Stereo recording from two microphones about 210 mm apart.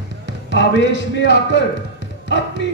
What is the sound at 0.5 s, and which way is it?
Speech, 60° left (ahead or behind).